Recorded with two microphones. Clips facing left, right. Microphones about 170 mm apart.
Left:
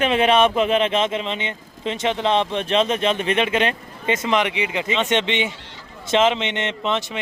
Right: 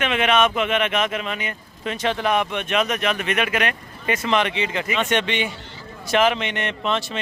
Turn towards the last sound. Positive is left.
turn(degrees=20)  # may be behind; listen again after turning